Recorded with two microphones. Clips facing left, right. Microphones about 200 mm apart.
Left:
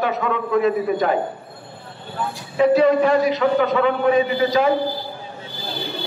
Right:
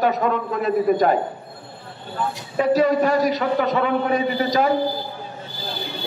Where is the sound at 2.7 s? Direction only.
40° right (ahead or behind).